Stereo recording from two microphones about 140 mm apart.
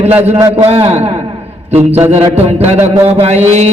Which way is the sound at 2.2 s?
15° right (ahead or behind).